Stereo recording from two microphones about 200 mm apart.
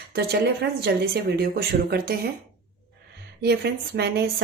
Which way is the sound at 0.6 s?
55° right (ahead or behind).